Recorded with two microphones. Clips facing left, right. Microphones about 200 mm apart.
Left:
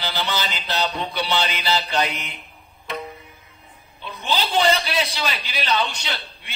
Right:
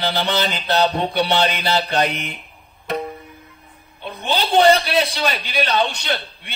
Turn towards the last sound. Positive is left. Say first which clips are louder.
# right 7 dB
turn(degrees=-55)  # may be behind; listen again after turning